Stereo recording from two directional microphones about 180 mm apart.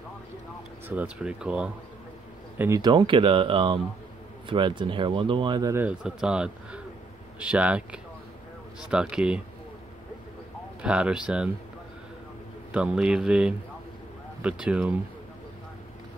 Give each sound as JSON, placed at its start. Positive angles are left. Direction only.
{"t": 0.8, "sound": "speech", "side_deg": -5}
{"t": 2.8, "sound": "speech", "side_deg": -25}
{"t": 10.8, "sound": "speech", "side_deg": -5}
{"t": 12.7, "sound": "speech", "side_deg": -5}